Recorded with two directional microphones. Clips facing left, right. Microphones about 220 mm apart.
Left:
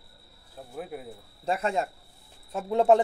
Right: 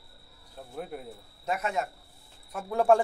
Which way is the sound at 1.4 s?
30° left (ahead or behind).